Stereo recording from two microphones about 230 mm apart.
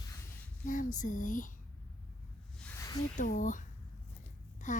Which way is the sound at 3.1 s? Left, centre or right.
Left.